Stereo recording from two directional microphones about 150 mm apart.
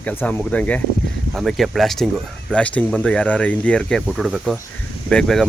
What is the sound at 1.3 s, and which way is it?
Speech, centre (ahead or behind).